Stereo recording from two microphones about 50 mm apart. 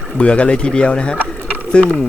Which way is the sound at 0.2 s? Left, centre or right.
Left.